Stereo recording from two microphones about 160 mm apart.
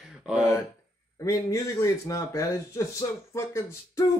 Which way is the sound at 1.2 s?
20° left (ahead or behind).